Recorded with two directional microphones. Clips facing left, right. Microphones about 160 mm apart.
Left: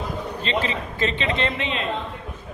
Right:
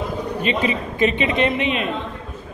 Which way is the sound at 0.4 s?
15° right (ahead or behind).